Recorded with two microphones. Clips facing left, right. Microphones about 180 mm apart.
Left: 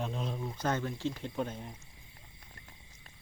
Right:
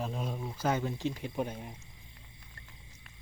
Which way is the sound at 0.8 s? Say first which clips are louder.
Right 1 dB; 15° right (ahead or behind).